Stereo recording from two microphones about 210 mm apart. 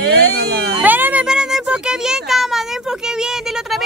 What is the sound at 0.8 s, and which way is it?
A child's voice, 10° right (ahead or behind).